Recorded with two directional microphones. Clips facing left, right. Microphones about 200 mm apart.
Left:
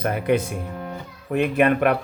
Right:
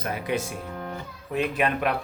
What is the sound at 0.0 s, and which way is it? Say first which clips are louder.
Speech: left 7 dB; 60° left (ahead or behind).